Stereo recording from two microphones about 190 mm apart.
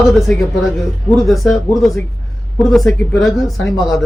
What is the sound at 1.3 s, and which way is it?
Speech, centre (ahead or behind).